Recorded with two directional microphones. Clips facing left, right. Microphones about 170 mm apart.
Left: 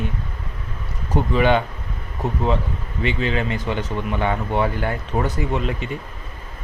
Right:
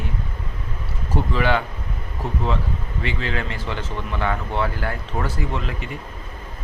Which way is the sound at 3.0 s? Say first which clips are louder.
Left 5 dB; 20° left (ahead or behind).